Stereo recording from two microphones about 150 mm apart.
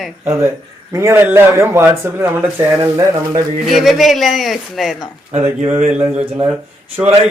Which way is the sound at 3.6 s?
Centre (ahead or behind).